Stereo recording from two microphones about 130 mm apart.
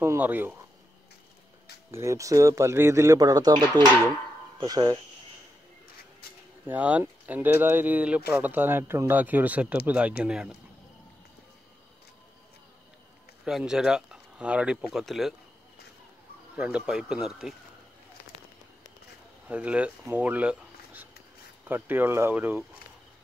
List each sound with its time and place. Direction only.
0.0 s speech: 15° right (ahead or behind)
1.9 s speech: 20° right (ahead or behind)
6.6 s speech: 10° right (ahead or behind)
13.5 s speech: 5° right (ahead or behind)
16.5 s speech: 10° right (ahead or behind)
19.4 s speech: 10° right (ahead or behind)